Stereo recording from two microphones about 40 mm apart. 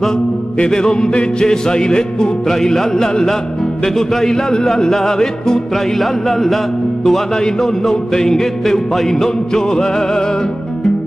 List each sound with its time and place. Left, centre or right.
0.6 s music: centre
5.9 s a man's voice: centre
7.1 s music: centre